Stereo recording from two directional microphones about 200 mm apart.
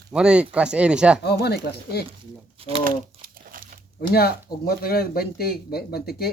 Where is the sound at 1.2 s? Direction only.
55° left (ahead or behind).